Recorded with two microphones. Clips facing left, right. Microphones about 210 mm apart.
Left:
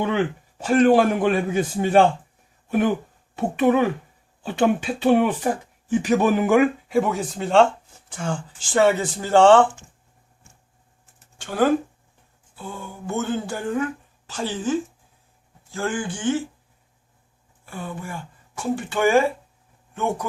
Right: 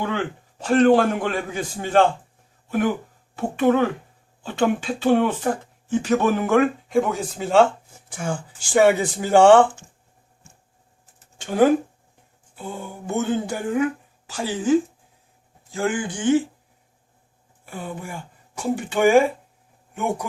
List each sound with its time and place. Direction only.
0.6 s a man's voice: 10° left (ahead or behind)
3.3 s a man's voice: 15° left (ahead or behind); by 9.6 s 10° right (ahead or behind)
11.3 s speech: 15° right (ahead or behind)
17.7 s a man's voice: 15° right (ahead or behind)